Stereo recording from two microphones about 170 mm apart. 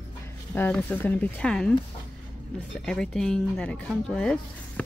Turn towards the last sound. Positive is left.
turn(degrees=5)  # may be behind; listen again after turning